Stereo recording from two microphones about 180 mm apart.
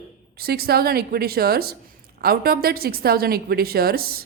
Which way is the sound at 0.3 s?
60° right (ahead or behind).